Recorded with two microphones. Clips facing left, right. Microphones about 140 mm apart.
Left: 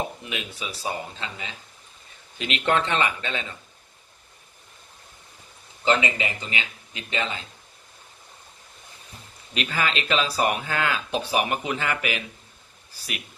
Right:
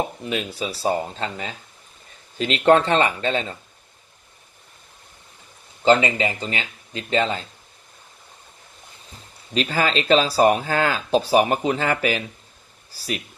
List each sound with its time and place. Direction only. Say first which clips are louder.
0.3 s speech: right 7 dB; 35° right (ahead or behind)
5.8 s speech: right 6 dB; 35° right (ahead or behind)
9.6 s speech: right 5 dB; 35° right (ahead or behind)